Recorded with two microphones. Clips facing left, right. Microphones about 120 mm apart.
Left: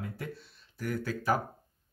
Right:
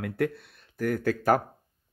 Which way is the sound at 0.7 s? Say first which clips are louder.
Right 7 dB; 50° right (ahead or behind).